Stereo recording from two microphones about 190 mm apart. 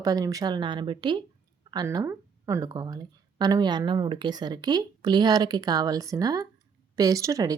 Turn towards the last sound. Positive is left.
turn(degrees=-20)  # may be behind; listen again after turning